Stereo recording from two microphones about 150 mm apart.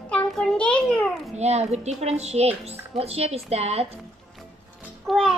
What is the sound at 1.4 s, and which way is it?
Speech, 45° right (ahead or behind).